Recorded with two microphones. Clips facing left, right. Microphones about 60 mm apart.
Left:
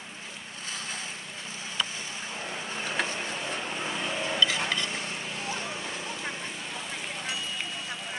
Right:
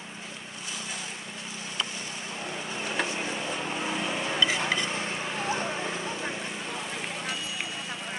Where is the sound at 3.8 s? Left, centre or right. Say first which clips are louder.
Right 1 dB; centre.